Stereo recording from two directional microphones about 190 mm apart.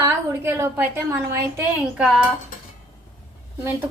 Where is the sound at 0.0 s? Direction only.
15° right (ahead or behind).